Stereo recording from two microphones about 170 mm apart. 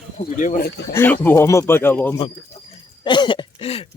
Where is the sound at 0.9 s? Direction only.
10° left (ahead or behind).